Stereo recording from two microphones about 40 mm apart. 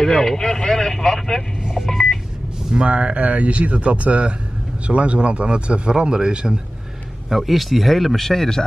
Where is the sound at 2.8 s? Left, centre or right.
Right.